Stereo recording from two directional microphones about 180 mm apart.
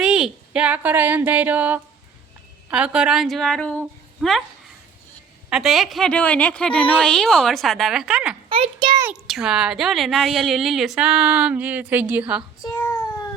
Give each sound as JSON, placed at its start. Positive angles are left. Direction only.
{"t": 0.0, "sound": "a woman's voice", "side_deg": -5}
{"t": 5.5, "sound": "a woman's voice", "side_deg": 0}
{"t": 8.4, "sound": "a child's voice", "side_deg": -30}
{"t": 9.2, "sound": "a woman's voice", "side_deg": 0}